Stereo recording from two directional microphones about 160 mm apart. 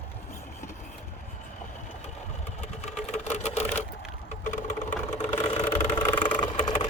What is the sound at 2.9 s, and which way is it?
Vehicle, 45° left (ahead or behind).